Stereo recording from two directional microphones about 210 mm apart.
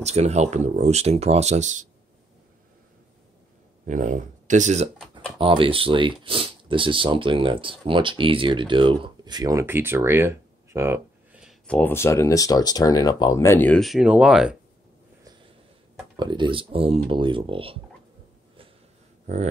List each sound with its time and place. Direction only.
0.0 s speech: 30° right (ahead or behind)
3.8 s speech: 35° right (ahead or behind); by 11.5 s 10° right (ahead or behind)
11.6 s speech: 5° left (ahead or behind)
16.2 s speech: 20° right (ahead or behind)
19.2 s speech: 35° right (ahead or behind)